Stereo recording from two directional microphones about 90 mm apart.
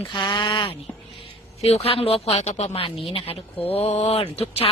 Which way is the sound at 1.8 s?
90° left.